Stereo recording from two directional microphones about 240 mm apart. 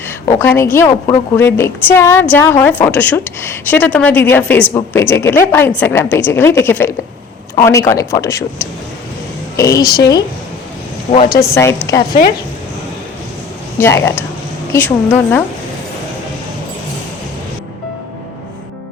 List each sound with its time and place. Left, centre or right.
0.3 s a woman's voice: centre
11.1 s speech: left
11.3 s a woman's voice: centre
13.7 s a woman's voice: centre